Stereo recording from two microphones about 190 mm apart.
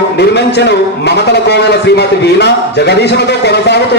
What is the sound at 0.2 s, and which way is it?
Speech, 60° left (ahead or behind).